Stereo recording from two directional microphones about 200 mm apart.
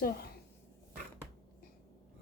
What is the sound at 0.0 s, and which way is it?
Speech, 50° left (ahead or behind).